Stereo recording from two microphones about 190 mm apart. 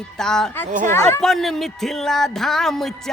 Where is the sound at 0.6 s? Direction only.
40° right (ahead or behind).